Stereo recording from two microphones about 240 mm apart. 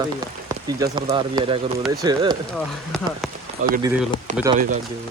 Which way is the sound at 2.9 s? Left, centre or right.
Centre.